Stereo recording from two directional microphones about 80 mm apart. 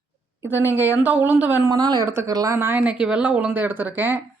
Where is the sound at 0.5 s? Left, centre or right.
Right.